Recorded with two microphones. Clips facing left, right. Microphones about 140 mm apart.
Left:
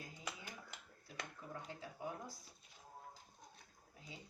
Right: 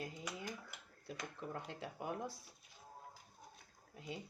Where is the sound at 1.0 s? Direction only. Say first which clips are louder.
Right 5 dB; 70° right (ahead or behind).